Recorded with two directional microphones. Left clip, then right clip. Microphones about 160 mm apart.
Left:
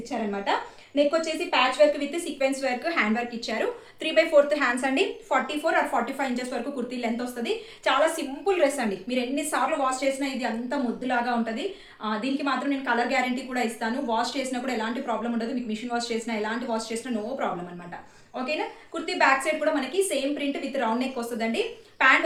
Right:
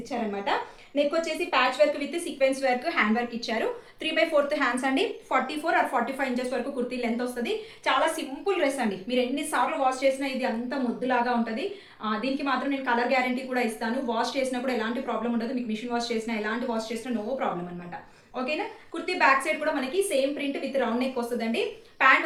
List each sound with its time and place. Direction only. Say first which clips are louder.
0.1 s a woman's voice: left 1 dB; 25° left (ahead or behind)
10.7 s a woman's voice: left 1 dB; 30° left (ahead or behind)
18.3 s a woman's voice: left 1 dB; 30° left (ahead or behind)